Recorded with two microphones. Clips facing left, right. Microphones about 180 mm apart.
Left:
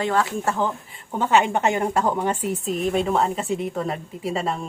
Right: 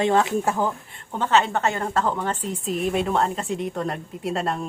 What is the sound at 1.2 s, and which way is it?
A woman's voice, 10° left (ahead or behind).